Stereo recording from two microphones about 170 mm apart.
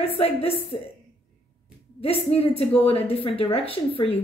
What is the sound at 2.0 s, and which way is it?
A woman's voice, 35° left (ahead or behind).